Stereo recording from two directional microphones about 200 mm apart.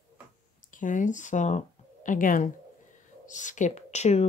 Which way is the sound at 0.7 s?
40° left (ahead or behind).